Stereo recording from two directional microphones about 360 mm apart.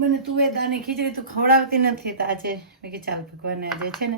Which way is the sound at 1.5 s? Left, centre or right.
Right.